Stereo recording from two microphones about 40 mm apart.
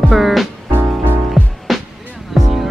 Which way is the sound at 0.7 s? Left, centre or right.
Right.